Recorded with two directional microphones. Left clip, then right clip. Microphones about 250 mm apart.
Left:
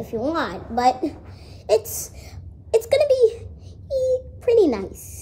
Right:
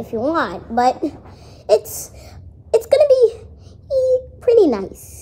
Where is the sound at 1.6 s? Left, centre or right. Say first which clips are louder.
Right 4 dB; centre.